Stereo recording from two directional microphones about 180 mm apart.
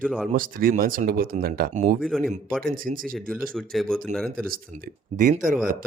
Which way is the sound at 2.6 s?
50° right (ahead or behind).